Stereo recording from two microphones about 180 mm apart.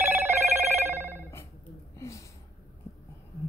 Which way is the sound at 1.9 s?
15° left (ahead or behind).